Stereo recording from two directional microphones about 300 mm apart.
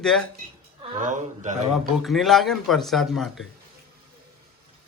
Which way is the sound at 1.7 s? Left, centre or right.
Centre.